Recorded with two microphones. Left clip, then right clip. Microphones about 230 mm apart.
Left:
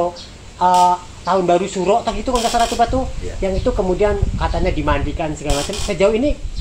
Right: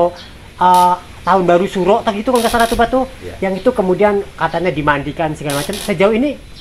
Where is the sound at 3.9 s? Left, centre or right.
Right.